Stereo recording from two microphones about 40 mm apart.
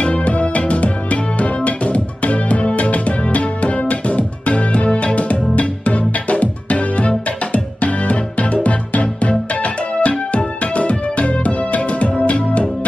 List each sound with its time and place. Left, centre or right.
0.0 s music: left